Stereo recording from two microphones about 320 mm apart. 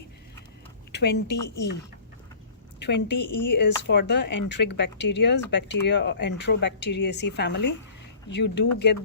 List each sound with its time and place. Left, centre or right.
0.9 s speech: left
2.7 s a woman's voice: left
3.2 s speech: left
3.6 s speech: left